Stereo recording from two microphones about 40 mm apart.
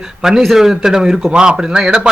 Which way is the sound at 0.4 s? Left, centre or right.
Centre.